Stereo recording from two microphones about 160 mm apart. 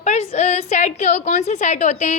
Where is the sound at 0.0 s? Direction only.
45° left (ahead or behind).